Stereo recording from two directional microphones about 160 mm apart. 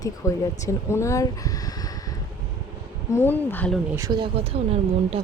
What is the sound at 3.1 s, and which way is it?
Speech, 15° left (ahead or behind).